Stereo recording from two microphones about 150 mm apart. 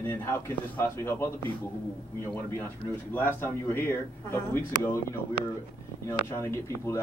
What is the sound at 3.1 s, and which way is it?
A man's voice, 15° left (ahead or behind).